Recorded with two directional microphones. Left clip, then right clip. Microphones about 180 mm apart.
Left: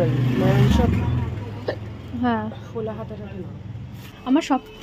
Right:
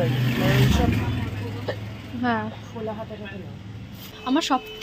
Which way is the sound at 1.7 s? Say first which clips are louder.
Left 4 dB; 65° left (ahead or behind).